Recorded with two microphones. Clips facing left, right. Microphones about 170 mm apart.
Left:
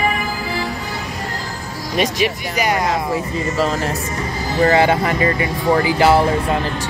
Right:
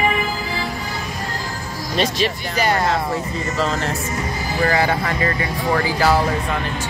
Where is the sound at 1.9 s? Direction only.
15° left (ahead or behind).